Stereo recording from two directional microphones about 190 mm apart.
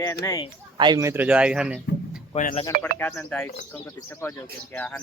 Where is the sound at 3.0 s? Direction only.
10° left (ahead or behind).